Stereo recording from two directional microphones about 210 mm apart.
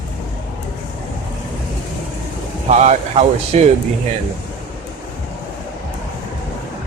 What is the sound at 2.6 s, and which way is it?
Speech, 30° right (ahead or behind).